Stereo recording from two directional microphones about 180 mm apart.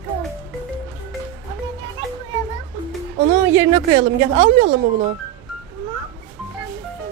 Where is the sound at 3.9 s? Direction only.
30° right (ahead or behind).